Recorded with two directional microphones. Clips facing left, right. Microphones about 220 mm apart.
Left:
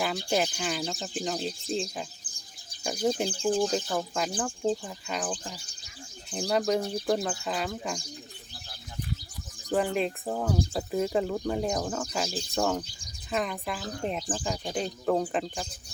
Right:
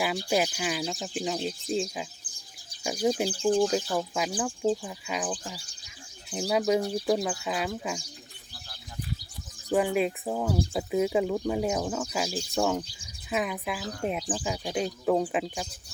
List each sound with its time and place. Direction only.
0.3 s speech: 5° right (ahead or behind)
2.3 s bird: 25° left (ahead or behind)
2.8 s speech: 5° right (ahead or behind)
3.4 s speech: 5° left (ahead or behind)
6.3 s speech: 5° right (ahead or behind)
9.6 s speech: 5° right (ahead or behind)